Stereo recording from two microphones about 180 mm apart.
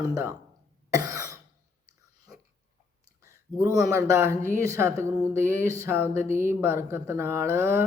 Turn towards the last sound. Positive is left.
turn(degrees=-15)  # may be behind; listen again after turning